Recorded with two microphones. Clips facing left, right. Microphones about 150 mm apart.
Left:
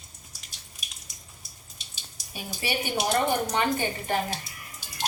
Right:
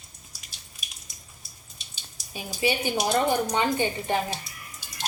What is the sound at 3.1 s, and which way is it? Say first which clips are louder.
A woman's voice: right 1 dB; 15° right (ahead or behind).